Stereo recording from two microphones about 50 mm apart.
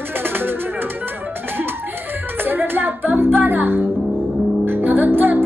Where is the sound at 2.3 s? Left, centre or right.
Right.